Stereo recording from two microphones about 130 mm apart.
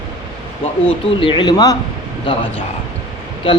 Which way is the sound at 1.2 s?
40° left (ahead or behind).